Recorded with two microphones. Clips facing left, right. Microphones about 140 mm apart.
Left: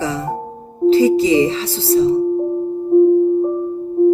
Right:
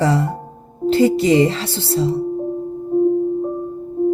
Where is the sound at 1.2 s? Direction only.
60° right (ahead or behind).